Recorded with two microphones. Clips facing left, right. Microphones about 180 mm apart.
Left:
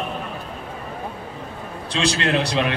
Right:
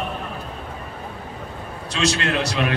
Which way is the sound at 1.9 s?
30° left (ahead or behind).